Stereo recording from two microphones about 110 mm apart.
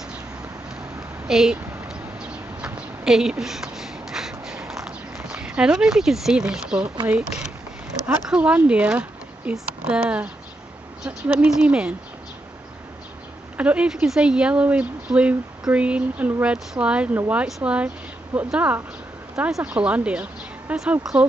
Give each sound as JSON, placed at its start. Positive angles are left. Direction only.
{"t": 1.2, "sound": "a sound", "side_deg": -5}
{"t": 7.1, "sound": "speech", "side_deg": -10}
{"t": 13.6, "sound": "speech", "side_deg": -10}